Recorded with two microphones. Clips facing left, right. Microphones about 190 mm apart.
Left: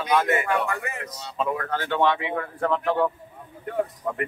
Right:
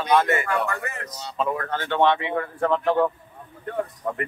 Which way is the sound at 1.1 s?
35° right (ahead or behind).